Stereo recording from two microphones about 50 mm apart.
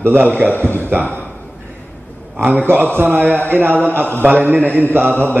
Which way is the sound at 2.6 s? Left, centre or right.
Right.